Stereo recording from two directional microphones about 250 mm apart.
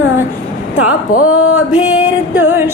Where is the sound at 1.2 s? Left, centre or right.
Left.